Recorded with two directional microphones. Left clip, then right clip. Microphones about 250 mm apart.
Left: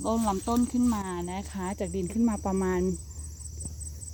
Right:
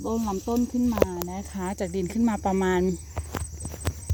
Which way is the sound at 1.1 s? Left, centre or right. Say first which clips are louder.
Right 1 dB; right.